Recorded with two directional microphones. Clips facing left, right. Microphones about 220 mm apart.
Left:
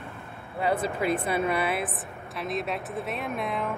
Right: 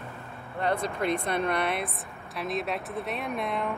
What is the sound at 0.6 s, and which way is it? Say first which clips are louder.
Speech: left 2 dB; 5° left (ahead or behind).